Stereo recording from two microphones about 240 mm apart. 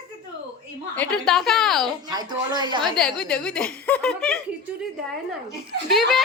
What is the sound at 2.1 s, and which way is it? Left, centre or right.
Speech, centre.